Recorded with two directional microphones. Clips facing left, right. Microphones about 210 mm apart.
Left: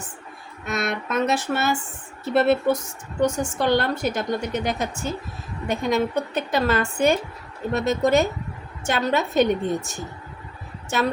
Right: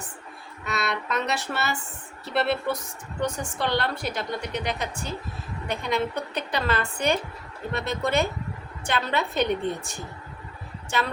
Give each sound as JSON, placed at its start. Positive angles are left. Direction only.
{"t": 0.6, "sound": "a woman's voice", "side_deg": 50}